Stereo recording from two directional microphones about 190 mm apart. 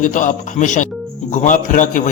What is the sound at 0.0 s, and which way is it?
A man's voice, 40° left (ahead or behind).